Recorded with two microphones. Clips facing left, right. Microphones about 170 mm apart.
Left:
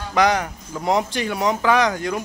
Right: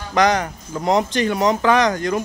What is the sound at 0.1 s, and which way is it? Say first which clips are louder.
Speech: right 1 dB; 5° left (ahead or behind).